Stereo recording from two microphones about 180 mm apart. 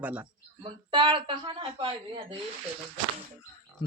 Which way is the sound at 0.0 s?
10° right (ahead or behind).